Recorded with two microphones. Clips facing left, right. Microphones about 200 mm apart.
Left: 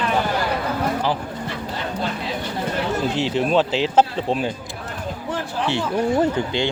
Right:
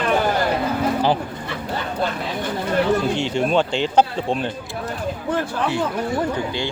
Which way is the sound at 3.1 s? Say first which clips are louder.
Even; centre (ahead or behind).